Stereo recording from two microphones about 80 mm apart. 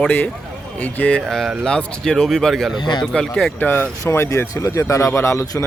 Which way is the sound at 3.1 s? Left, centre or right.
Centre.